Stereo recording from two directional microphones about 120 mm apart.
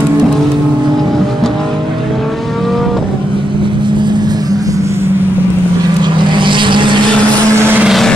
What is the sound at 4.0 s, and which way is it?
Vehicle, 40° right (ahead or behind).